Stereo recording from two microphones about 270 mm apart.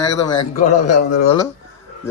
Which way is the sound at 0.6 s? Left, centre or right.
Left.